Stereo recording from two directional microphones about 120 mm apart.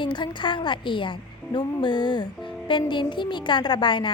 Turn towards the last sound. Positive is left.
turn(degrees=40)  # may be behind; listen again after turning